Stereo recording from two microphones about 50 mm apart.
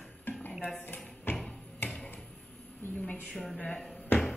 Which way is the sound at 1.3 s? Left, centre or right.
Centre.